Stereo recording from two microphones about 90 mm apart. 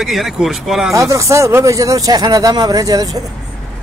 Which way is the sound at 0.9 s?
35° right (ahead or behind).